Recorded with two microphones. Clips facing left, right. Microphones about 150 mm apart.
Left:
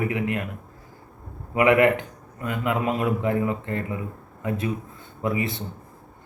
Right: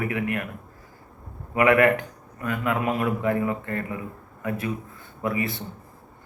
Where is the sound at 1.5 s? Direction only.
20° left (ahead or behind).